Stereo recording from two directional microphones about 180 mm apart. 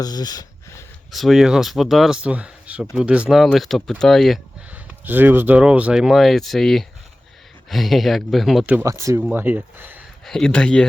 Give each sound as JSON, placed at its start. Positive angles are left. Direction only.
{"t": 0.0, "sound": "speech", "side_deg": 20}
{"t": 1.1, "sound": "speech", "side_deg": 0}
{"t": 5.0, "sound": "speech", "side_deg": -10}
{"t": 10.2, "sound": "speech", "side_deg": 5}